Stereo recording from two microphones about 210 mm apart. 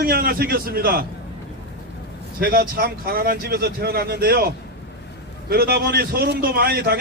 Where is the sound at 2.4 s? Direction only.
45° right (ahead or behind).